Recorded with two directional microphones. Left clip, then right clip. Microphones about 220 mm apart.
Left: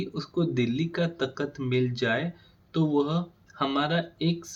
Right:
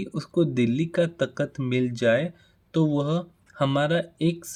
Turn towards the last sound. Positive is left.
turn(degrees=-55)  # may be behind; listen again after turning